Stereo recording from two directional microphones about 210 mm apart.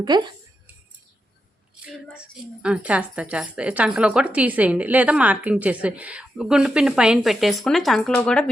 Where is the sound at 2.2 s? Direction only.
5° right (ahead or behind).